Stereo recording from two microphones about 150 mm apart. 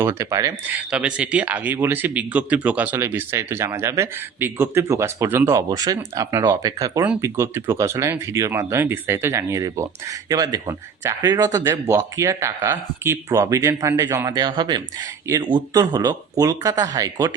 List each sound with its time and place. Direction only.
0.0 s speech: 20° right (ahead or behind)
0.7 s speech: 10° right (ahead or behind); by 17.3 s 25° right (ahead or behind)